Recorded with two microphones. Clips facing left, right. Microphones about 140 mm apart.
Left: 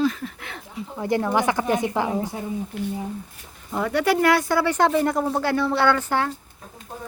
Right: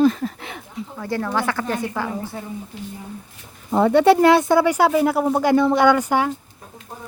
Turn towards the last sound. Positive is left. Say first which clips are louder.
# right 4 dB
turn(degrees=-15)  # may be behind; listen again after turning